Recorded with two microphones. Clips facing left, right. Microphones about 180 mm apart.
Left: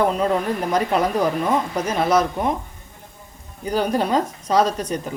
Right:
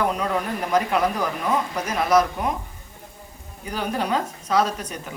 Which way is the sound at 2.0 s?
30° left (ahead or behind).